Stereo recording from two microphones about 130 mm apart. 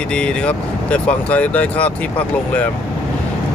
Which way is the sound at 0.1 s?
10° left (ahead or behind).